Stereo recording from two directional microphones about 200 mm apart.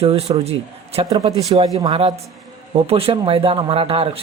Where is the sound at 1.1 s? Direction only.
20° right (ahead or behind).